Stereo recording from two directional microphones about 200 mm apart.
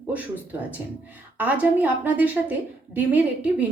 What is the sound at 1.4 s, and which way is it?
A woman's voice, 5° right (ahead or behind).